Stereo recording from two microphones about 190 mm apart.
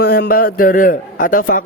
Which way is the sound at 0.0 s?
55° left (ahead or behind).